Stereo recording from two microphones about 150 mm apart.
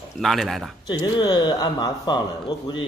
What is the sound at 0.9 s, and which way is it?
Speech, 30° left (ahead or behind).